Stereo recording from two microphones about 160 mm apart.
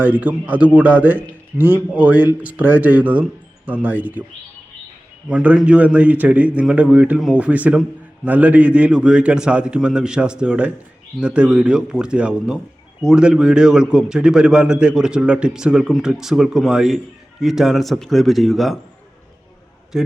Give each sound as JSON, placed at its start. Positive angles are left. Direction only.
{"t": 0.0, "sound": "a man's voice", "side_deg": -10}
{"t": 5.3, "sound": "a man's voice", "side_deg": -10}
{"t": 19.9, "sound": "a man's voice", "side_deg": -5}